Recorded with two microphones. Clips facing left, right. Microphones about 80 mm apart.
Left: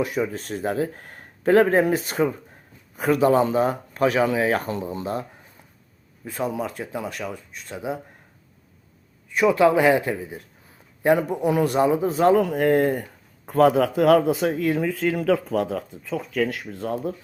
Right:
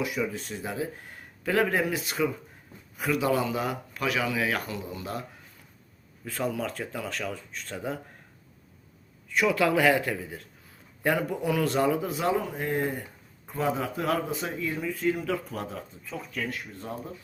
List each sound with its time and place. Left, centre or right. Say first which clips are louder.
0.0 s a man's voice: left 5 dB; left
6.2 s a man's voice: left 3 dB; left
9.3 s a man's voice: left 6 dB; left
12.1 s speech: left 9 dB; left
12.4 s speech: left 10 dB; left